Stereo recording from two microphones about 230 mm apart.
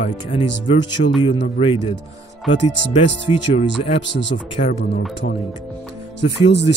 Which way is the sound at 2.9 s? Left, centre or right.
Left.